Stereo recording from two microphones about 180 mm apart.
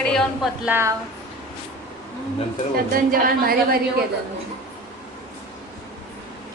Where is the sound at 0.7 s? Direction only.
15° right (ahead or behind).